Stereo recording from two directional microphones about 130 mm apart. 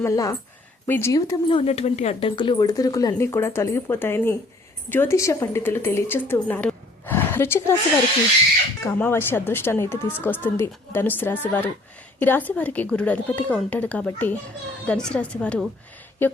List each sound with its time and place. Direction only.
0.0 s speech: 25° left (ahead or behind)
1.5 s speech: 45° left (ahead or behind)
2.3 s a woman's voice: 40° left (ahead or behind); by 7.8 s 20° left (ahead or behind)
8.8 s a woman's voice: 15° left (ahead or behind)